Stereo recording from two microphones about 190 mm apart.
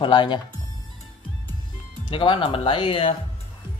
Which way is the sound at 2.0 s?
25° left (ahead or behind).